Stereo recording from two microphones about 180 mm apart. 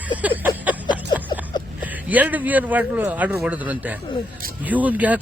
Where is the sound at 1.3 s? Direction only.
25° left (ahead or behind).